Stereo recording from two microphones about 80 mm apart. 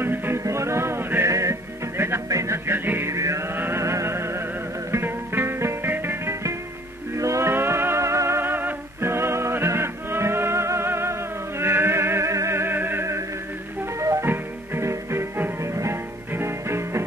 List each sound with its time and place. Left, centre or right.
0.0 s music: right
2.2 s music: right
3.1 s music: right
3.5 s music: right
3.8 s music: right
14.2 s music: right